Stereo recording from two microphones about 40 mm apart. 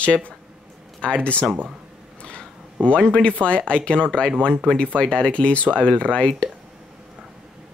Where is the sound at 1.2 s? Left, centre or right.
Left.